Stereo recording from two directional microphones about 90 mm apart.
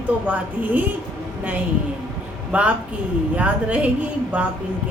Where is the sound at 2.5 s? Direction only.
15° right (ahead or behind).